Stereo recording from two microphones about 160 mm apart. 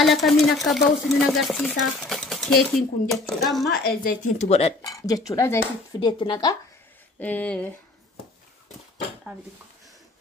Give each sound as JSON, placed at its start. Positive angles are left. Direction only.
{"t": 0.0, "sound": "a sound", "side_deg": 0}
{"t": 4.0, "sound": "speech", "side_deg": 55}
{"t": 4.8, "sound": "speech", "side_deg": 25}
{"t": 7.2, "sound": "speech", "side_deg": 10}